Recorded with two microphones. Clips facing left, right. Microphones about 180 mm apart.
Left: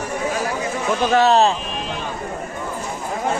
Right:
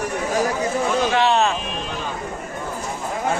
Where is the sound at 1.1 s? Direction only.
40° left (ahead or behind).